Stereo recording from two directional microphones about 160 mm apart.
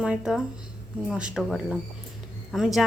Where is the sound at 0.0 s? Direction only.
5° right (ahead or behind).